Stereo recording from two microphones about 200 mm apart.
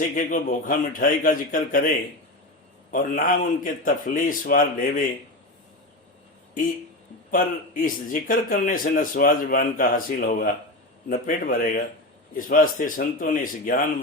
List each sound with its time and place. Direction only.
0.2 s a man's voice: 40° left (ahead or behind)
2.9 s a man's voice: 45° left (ahead or behind)
7.3 s a man's voice: 45° left (ahead or behind)